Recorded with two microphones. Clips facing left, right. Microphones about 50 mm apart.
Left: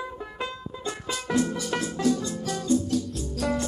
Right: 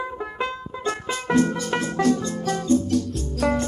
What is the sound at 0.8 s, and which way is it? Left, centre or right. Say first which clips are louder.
Music: right 6 dB; right.